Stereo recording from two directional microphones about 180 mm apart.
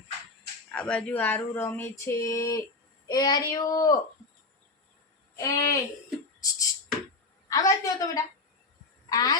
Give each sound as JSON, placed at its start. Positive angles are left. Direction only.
{"t": 0.7, "sound": "speech", "side_deg": 5}
{"t": 5.4, "sound": "speech", "side_deg": 20}
{"t": 6.4, "sound": "a sound", "side_deg": 20}
{"t": 7.5, "sound": "speech", "side_deg": 20}